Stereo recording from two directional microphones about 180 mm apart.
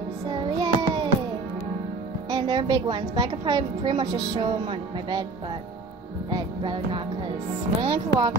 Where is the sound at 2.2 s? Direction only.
25° right (ahead or behind).